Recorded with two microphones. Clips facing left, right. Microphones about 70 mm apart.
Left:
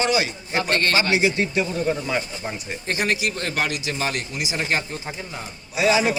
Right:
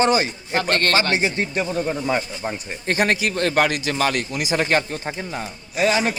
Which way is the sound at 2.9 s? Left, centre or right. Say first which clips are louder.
Right 4 dB; right.